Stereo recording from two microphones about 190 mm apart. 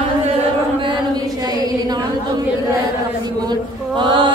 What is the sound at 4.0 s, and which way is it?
Chant, 25° right (ahead or behind).